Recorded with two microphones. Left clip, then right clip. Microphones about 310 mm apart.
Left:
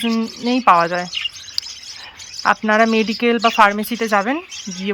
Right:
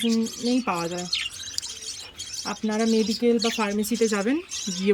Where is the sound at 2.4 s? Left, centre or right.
Left.